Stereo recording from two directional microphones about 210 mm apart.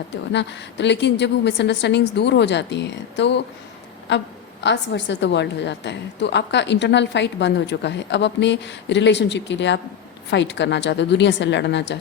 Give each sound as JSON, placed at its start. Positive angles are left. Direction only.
{"t": 0.1, "sound": "a woman's voice", "side_deg": 55}